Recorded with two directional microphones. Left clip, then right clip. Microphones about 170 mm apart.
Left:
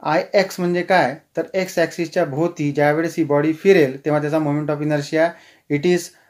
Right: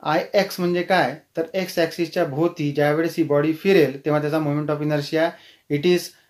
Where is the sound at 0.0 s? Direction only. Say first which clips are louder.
Left 3 dB; 25° left (ahead or behind).